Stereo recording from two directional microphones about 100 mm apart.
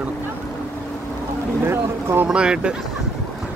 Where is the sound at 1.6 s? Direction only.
20° right (ahead or behind).